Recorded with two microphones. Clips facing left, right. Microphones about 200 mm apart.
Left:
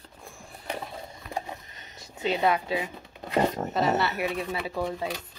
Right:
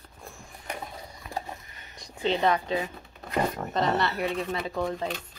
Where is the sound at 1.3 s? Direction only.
20° left (ahead or behind).